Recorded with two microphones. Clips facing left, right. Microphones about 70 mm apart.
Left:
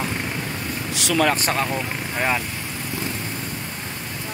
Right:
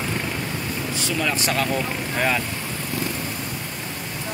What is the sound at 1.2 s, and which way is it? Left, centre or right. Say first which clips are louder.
Speech: left 4 dB; left.